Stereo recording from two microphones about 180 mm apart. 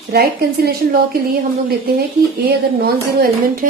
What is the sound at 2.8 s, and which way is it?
Speech, 55° right (ahead or behind).